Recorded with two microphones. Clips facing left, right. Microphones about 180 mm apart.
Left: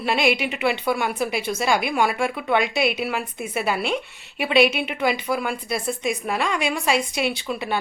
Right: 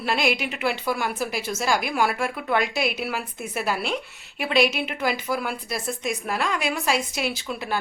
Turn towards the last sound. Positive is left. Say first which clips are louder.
# left 3 dB
turn(degrees=0)  # may be behind; listen again after turning